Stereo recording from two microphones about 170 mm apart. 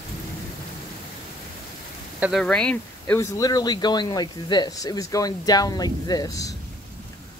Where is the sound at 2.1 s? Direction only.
10° right (ahead or behind).